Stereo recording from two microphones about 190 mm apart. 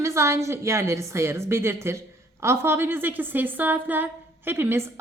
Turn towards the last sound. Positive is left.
turn(degrees=-10)  # may be behind; listen again after turning